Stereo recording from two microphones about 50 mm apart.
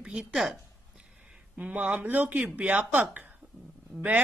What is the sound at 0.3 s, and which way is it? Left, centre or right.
Speech, centre.